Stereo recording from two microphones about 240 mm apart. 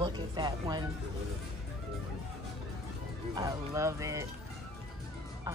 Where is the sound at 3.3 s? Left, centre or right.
Centre.